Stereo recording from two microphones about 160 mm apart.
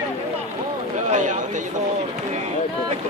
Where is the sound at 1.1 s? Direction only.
50° right (ahead or behind).